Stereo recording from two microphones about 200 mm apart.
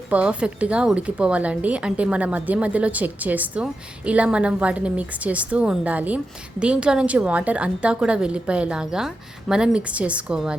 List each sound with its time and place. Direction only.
0.1 s a woman's voice: 5° right (ahead or behind)